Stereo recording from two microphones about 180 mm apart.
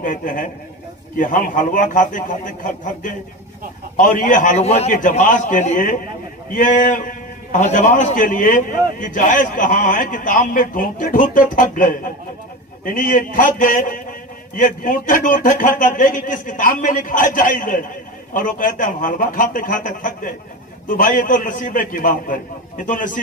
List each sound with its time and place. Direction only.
0.0 s a man's voice: 50° left (ahead or behind)
4.9 s a man's voice: 50° left (ahead or behind)